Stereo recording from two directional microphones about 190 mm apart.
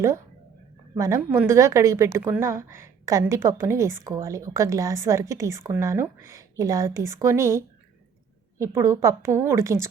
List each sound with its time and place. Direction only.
0.9 s a woman's voice: 15° right (ahead or behind)